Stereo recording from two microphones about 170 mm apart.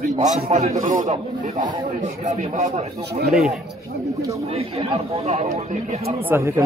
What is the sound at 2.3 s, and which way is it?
Speech, 40° right (ahead or behind).